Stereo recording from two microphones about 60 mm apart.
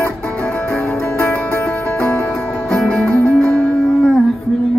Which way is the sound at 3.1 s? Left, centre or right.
Left.